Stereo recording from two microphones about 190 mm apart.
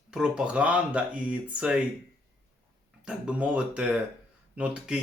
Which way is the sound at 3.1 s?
5° right (ahead or behind).